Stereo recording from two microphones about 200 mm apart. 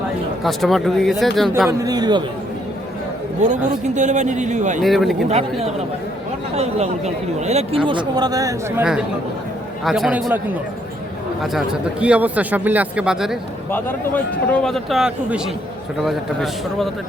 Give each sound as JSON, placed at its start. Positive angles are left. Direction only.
{"t": 0.4, "sound": "a man's voice", "side_deg": 0}
{"t": 1.8, "sound": "speech", "side_deg": -20}
{"t": 3.4, "sound": "speech", "side_deg": -35}
{"t": 4.8, "sound": "a man's voice", "side_deg": 0}
{"t": 6.6, "sound": "speech", "side_deg": -30}
{"t": 7.9, "sound": "speech", "side_deg": -20}
{"t": 8.8, "sound": "a man's voice", "side_deg": -5}
{"t": 11.5, "sound": "a man's voice", "side_deg": -5}
{"t": 13.7, "sound": "a man's voice", "side_deg": 10}